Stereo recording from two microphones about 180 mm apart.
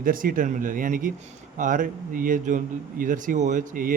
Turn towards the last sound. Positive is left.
turn(degrees=-50)  # may be behind; listen again after turning